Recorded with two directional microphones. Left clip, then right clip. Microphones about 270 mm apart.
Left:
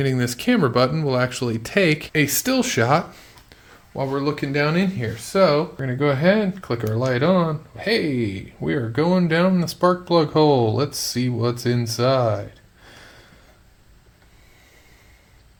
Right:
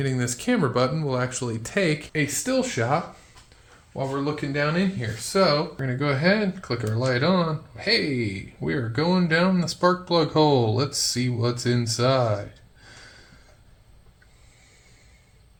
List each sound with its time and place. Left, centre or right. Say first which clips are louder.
0.0 s speech: left 5 dB; left
2.1 s speech: left 4 dB; left